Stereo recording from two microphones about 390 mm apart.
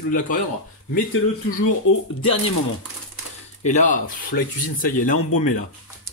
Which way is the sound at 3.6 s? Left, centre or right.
Centre.